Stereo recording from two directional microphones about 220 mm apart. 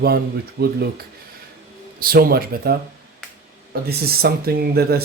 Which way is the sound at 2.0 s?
40° right (ahead or behind).